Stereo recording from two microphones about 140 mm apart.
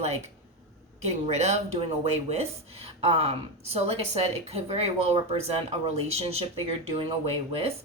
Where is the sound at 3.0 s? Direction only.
45° right (ahead or behind).